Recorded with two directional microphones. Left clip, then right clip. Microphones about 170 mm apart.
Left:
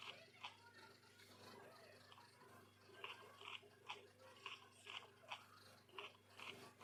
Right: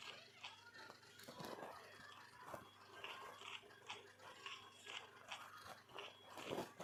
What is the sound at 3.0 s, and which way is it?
Dog, 40° left (ahead or behind).